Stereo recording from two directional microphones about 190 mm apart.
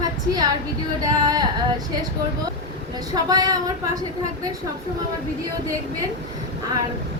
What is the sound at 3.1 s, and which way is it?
Speech, 20° right (ahead or behind).